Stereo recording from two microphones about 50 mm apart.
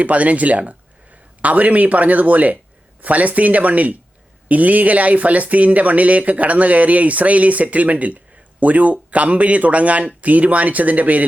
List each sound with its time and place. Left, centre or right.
0.0 s speech: right